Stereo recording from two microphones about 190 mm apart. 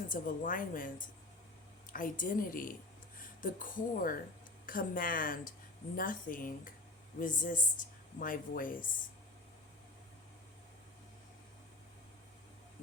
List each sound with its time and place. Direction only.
0.1 s speech: 45° left (ahead or behind)